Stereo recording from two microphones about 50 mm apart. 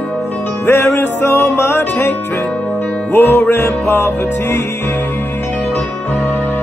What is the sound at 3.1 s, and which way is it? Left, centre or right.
Music, left.